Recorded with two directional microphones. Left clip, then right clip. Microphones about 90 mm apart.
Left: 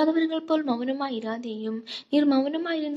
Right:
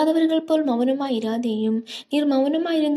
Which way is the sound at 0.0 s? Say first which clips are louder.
Right 5 dB; 30° right (ahead or behind).